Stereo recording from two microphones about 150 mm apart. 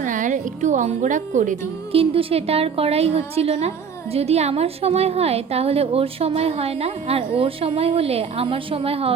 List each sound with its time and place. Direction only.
0.0 s a woman's voice: 60° right (ahead or behind)
1.9 s a woman's voice: 40° right (ahead or behind)